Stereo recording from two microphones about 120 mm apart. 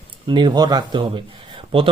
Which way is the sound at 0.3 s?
40° right (ahead or behind).